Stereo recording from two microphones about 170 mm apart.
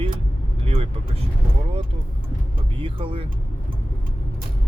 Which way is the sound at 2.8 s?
30° right (ahead or behind).